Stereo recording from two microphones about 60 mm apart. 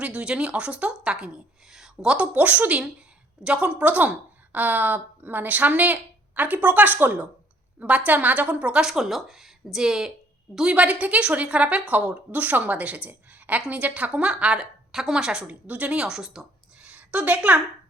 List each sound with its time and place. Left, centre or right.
0.0 s a woman's voice: centre
2.0 s a woman's voice: centre
8.8 s a woman's voice: centre
15.6 s a woman's voice: right